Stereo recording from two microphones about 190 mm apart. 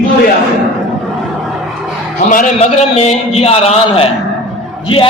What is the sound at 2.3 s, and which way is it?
A man's voice, 40° left (ahead or behind).